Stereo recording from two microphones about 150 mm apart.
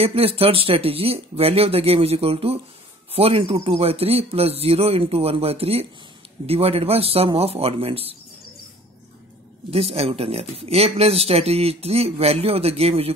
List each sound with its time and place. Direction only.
0.0 s speech: 40° right (ahead or behind)
9.7 s speech: 40° right (ahead or behind)